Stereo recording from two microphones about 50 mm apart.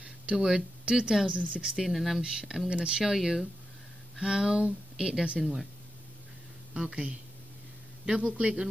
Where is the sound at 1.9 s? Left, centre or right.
Centre.